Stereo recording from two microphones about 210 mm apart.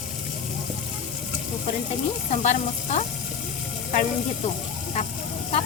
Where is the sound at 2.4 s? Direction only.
35° left (ahead or behind).